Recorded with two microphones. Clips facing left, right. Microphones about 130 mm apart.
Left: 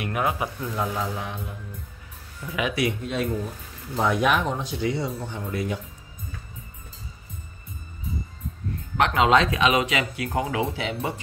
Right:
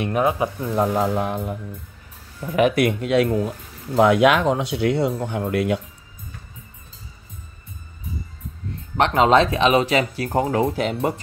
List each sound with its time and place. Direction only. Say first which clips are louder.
0.0 s speech: right 6 dB; 25° right (ahead or behind)
0.7 s speech: right 8 dB; 40° right (ahead or behind)
1.0 s music: right 9 dB; 50° right (ahead or behind)
3.0 s speech: right 8 dB; 85° right; by 5.8 s 70° right (ahead or behind)
8.9 s speech: right 4 dB; 35° right (ahead or behind)